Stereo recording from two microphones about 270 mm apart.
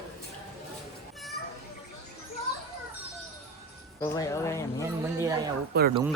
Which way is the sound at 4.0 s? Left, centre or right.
Centre.